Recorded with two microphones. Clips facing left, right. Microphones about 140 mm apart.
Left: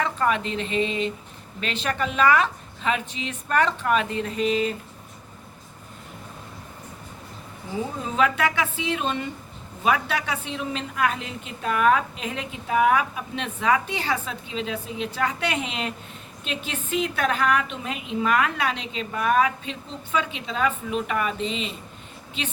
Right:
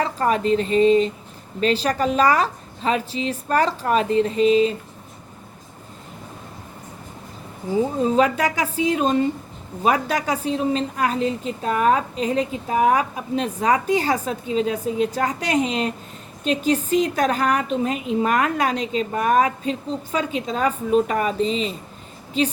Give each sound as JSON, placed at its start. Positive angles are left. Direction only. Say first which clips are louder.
{"t": 0.0, "sound": "a woman's voice", "louder": "right 3 dB", "side_deg": -35}
{"t": 8.0, "sound": "a woman's voice", "louder": "right 2 dB", "side_deg": -35}